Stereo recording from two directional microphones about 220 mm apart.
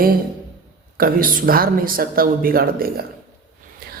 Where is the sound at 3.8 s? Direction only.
40° right (ahead or behind).